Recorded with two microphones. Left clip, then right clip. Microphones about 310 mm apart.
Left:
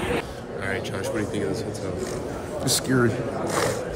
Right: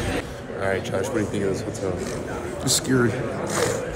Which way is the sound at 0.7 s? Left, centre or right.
Centre.